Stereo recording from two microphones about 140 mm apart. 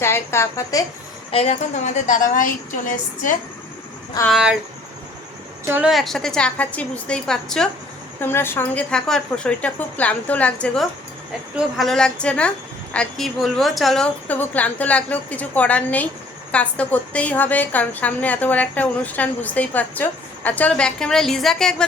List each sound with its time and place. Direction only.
0.0 s a woman's voice: 20° left (ahead or behind)
1.3 s a woman's voice: 45° left (ahead or behind); by 3.3 s 65° left (ahead or behind)
4.3 s a woman's voice: 5° right (ahead or behind)
5.6 s a woman's voice: 15° right (ahead or behind)
5.9 s a woman's voice: centre (ahead or behind)
8.2 s a woman's voice: 15° left (ahead or behind)